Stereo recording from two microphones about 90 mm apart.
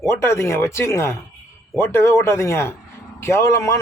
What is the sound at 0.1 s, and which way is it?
A man's voice, 30° left (ahead or behind).